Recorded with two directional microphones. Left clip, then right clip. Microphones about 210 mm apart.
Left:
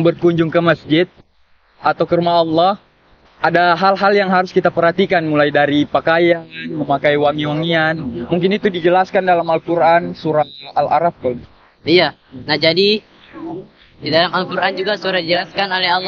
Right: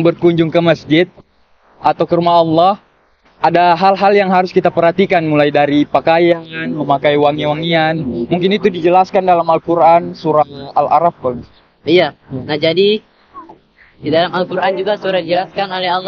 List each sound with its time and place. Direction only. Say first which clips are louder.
0.0 s a man's voice: right 2 dB; 15° right (ahead or behind)
11.8 s a man's voice: right 1 dB; centre (ahead or behind)
14.0 s a man's voice: right 1 dB; centre (ahead or behind)